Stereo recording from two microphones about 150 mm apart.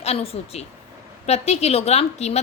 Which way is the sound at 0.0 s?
40° left (ahead or behind).